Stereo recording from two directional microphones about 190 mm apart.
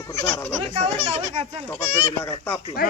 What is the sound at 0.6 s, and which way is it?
A child's voice, 30° right (ahead or behind).